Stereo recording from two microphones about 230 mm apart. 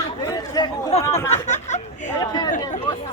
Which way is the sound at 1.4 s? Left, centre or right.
Left.